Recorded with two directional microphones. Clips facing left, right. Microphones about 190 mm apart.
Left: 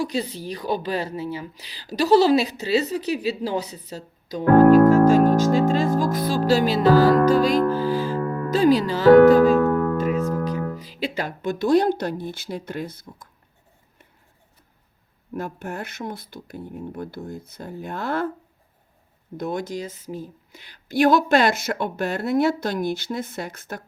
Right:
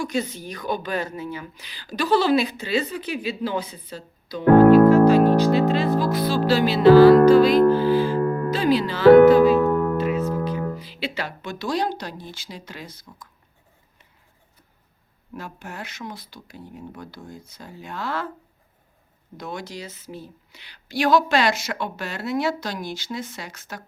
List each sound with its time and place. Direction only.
0.0 s a woman's voice: 35° left (ahead or behind)
10.0 s music: 45° left (ahead or behind)
10.8 s speech: 45° left (ahead or behind)
15.4 s speech: 50° left (ahead or behind)
19.4 s speech: 50° left (ahead or behind)